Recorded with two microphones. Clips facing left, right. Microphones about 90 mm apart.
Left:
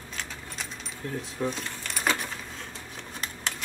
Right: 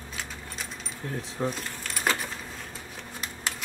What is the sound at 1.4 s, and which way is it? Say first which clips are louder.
Speech: even; 30° right (ahead or behind).